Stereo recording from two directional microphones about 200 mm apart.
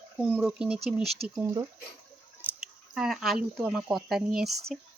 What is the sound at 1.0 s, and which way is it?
Speech, 30° right (ahead or behind).